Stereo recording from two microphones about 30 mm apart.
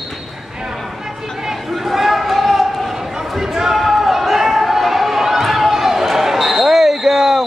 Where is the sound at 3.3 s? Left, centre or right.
Centre.